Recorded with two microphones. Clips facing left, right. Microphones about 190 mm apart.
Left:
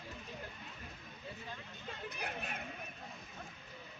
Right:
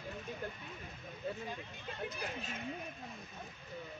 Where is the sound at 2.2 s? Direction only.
65° left (ahead or behind).